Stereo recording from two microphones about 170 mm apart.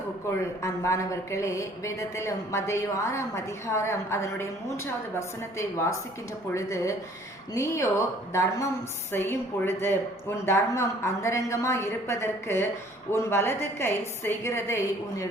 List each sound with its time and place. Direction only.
0.6 s a woman's voice: 20° left (ahead or behind)
5.5 s a woman's voice: 15° left (ahead or behind)